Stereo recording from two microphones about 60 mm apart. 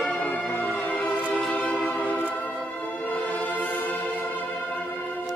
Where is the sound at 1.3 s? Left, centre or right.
Centre.